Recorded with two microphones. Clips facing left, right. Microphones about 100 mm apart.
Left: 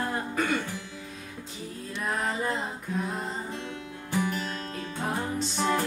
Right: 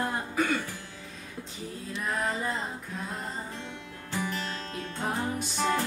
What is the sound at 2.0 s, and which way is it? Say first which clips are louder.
Female singing: left 1 dB; centre (ahead or behind).